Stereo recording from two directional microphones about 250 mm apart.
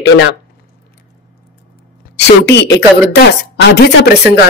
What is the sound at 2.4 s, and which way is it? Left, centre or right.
Speech, left.